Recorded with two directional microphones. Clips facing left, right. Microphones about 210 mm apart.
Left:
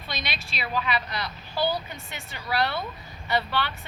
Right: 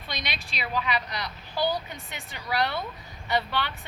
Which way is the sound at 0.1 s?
15° right (ahead or behind).